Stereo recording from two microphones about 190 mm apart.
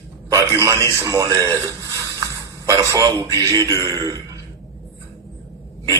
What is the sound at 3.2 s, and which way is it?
Speech, 20° right (ahead or behind).